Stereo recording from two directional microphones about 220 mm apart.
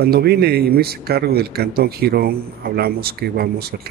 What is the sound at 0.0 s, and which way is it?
Speech, 45° right (ahead or behind).